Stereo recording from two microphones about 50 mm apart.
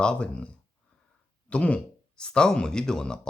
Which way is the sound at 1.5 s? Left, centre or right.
Left.